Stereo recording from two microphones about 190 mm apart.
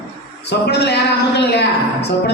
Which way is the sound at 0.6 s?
60° left (ahead or behind).